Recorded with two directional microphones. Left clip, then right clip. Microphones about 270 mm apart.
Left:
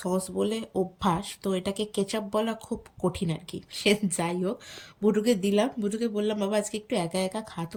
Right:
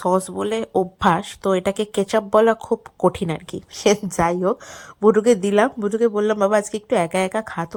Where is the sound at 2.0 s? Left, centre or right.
Right.